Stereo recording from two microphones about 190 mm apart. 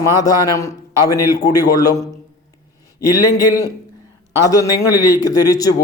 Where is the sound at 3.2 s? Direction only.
15° left (ahead or behind).